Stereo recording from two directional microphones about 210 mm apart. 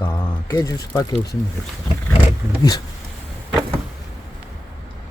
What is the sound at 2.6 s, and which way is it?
Speech, 20° left (ahead or behind).